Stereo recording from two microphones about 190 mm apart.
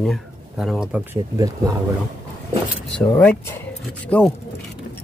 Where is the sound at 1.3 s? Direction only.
20° right (ahead or behind).